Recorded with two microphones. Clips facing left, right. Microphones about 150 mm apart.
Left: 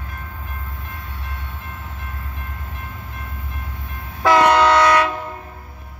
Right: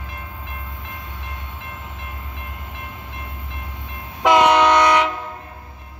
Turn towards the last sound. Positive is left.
turn(degrees=-15)  # may be behind; listen again after turning